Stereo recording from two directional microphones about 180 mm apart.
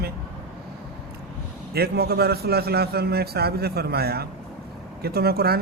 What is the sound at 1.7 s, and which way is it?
Speech, 60° right (ahead or behind).